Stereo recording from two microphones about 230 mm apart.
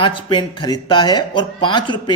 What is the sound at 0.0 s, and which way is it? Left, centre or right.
Speech, left.